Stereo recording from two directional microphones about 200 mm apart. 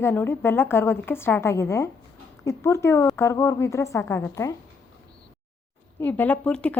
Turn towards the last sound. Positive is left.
turn(degrees=5)  # may be behind; listen again after turning